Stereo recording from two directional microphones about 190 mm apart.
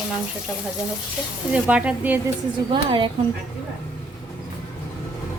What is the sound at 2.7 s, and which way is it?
Speech, 25° right (ahead or behind).